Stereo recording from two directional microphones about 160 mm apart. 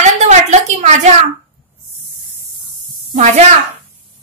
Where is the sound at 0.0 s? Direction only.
45° right (ahead or behind).